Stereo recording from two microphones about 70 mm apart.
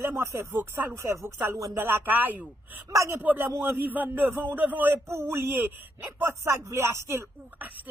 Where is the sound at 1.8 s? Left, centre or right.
Right.